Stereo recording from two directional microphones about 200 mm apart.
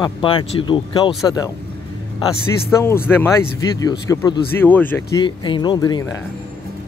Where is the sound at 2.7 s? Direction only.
15° left (ahead or behind).